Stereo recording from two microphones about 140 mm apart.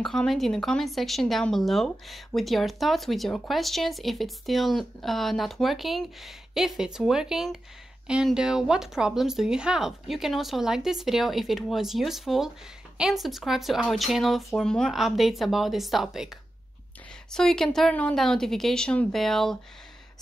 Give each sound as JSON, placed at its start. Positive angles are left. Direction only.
{"t": 0.0, "sound": "speech", "side_deg": 5}
{"t": 17.3, "sound": "speech", "side_deg": 5}